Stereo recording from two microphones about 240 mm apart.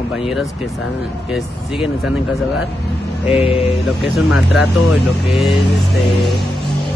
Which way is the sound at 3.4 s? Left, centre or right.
Left.